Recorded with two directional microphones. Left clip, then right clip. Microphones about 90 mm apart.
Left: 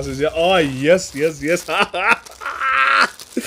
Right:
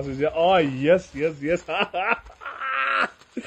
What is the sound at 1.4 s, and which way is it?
Speech, 30° left (ahead or behind).